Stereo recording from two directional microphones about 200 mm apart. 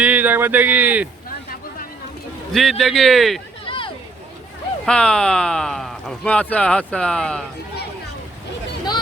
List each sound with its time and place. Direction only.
0.0 s speech: 5° right (ahead or behind)
2.5 s speech: centre (ahead or behind)
3.7 s a sound: 25° left (ahead or behind)
4.9 s speech: 5° left (ahead or behind)